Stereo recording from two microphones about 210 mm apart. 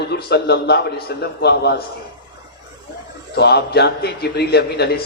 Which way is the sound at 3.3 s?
50° left (ahead or behind).